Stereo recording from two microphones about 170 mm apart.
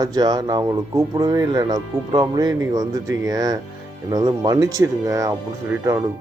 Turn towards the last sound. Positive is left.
turn(degrees=-15)  # may be behind; listen again after turning